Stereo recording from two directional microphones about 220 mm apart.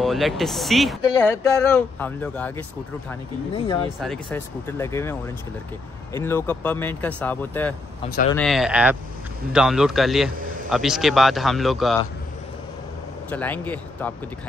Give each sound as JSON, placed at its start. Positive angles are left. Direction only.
{"t": 0.0, "sound": "speech", "side_deg": 0}
{"t": 3.5, "sound": "speech", "side_deg": 20}
{"t": 4.0, "sound": "speech", "side_deg": 5}
{"t": 6.1, "sound": "speech", "side_deg": 10}
{"t": 13.3, "sound": "speech", "side_deg": 10}